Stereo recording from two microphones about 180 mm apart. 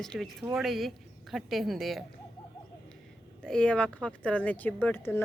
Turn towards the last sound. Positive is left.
turn(degrees=10)  # may be behind; listen again after turning